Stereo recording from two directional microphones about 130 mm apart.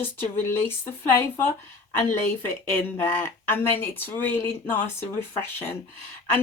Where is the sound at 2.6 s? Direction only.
15° left (ahead or behind).